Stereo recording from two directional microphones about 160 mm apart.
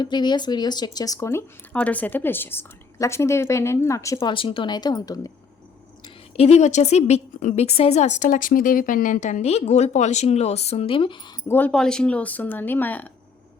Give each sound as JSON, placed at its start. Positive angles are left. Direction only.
{"t": 0.0, "sound": "speech", "side_deg": 25}
{"t": 6.3, "sound": "a woman's voice", "side_deg": 40}
{"t": 11.4, "sound": "speech", "side_deg": 10}